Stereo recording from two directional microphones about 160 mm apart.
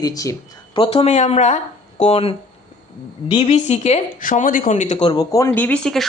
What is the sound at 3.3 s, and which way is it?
Speech, 40° left (ahead or behind).